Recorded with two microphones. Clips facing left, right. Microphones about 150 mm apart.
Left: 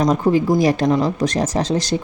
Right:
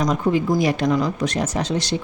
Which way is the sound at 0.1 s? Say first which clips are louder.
Left 4 dB; 35° left (ahead or behind).